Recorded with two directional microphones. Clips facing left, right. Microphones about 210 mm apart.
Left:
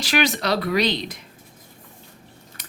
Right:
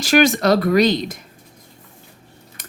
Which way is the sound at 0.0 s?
45° right (ahead or behind).